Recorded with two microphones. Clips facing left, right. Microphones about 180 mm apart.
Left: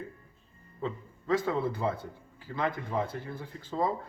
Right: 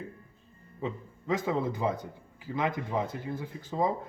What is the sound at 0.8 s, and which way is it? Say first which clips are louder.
A man's voice: even; 15° right (ahead or behind).